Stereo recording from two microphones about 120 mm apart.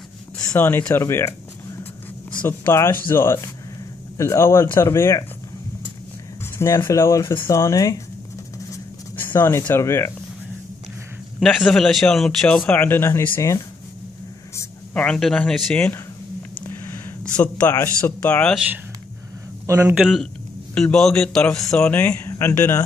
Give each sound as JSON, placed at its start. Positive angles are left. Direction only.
{"t": 0.6, "sound": "speech", "side_deg": 15}
{"t": 2.4, "sound": "speech", "side_deg": 20}
{"t": 6.6, "sound": "speech", "side_deg": 25}
{"t": 9.3, "sound": "speech", "side_deg": 20}
{"t": 11.3, "sound": "a man's voice", "side_deg": 5}
{"t": 15.0, "sound": "a man's voice", "side_deg": 5}
{"t": 16.5, "sound": "a sound", "side_deg": 20}
{"t": 17.8, "sound": "a man's voice", "side_deg": 15}
{"t": 19.6, "sound": "a man's voice", "side_deg": -25}
{"t": 19.9, "sound": "a man's voice", "side_deg": 0}